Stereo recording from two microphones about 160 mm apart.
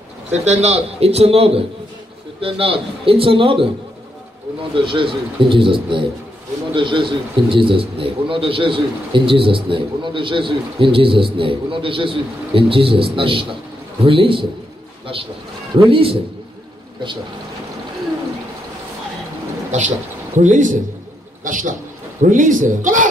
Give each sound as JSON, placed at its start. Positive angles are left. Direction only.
{"t": 0.3, "sound": "a man's voice", "side_deg": -45}
{"t": 4.7, "sound": "a man's voice", "side_deg": -30}
{"t": 15.8, "sound": "a man's voice", "side_deg": -35}
{"t": 20.3, "sound": "a man's voice", "side_deg": -50}